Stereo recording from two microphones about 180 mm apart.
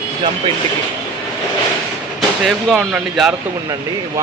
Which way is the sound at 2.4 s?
Centre (ahead or behind).